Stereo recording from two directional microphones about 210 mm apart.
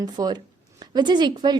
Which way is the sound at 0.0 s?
20° right (ahead or behind).